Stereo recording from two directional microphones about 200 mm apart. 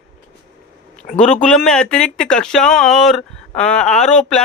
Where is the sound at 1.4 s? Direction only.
5° left (ahead or behind).